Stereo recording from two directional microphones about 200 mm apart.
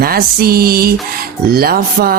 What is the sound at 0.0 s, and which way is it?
Speech, 50° right (ahead or behind).